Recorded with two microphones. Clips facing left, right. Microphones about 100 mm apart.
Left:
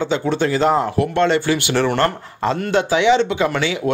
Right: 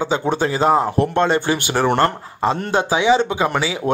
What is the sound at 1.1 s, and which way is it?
Speech, 20° right (ahead or behind).